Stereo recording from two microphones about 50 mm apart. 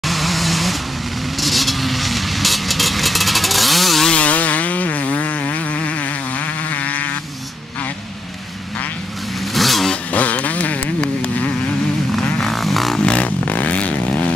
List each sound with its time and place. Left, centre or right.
0.0 s vehicle: centre
4.1 s insect: left
9.5 s vehicle: centre
10.1 s a sound: left
12.4 s vehicle: centre
13.0 s vehicle: left